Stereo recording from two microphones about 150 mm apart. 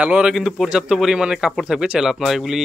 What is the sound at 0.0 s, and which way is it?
Speech, 5° right (ahead or behind).